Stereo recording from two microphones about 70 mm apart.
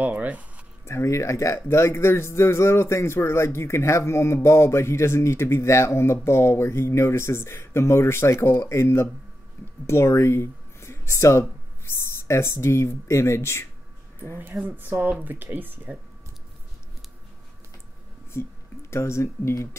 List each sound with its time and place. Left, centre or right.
0.0 s speech: right
0.8 s a man's voice: left
14.6 s speech: right
18.3 s speech: left